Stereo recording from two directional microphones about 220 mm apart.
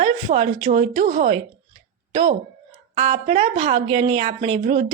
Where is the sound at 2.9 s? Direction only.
35° right (ahead or behind).